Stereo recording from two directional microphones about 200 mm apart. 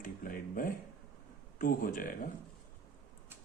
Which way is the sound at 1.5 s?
45° left (ahead or behind).